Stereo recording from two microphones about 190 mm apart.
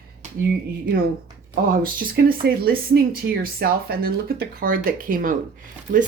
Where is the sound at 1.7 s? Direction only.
50° right (ahead or behind).